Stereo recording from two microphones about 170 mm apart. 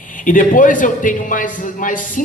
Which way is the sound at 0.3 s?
50° left (ahead or behind).